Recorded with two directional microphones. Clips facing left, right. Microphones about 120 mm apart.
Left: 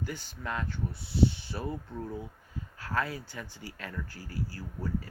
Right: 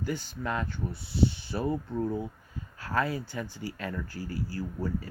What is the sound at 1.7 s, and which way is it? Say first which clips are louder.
Speech: right 7 dB; 50° right (ahead or behind).